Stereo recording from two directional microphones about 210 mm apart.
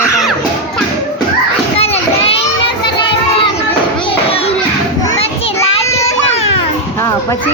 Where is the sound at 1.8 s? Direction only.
30° left (ahead or behind).